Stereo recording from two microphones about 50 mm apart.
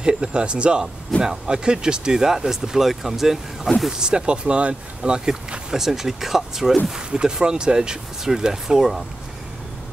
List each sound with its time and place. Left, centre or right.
0.0 s speech: centre
3.9 s speech: centre
6.9 s speech: centre